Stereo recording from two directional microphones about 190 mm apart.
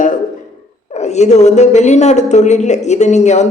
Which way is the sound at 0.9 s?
35° left (ahead or behind).